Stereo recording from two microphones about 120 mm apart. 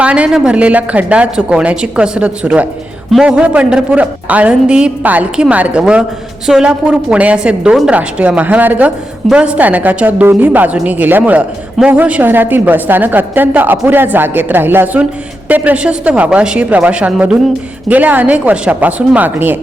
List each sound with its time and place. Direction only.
0.0 s a man's voice: 10° right (ahead or behind)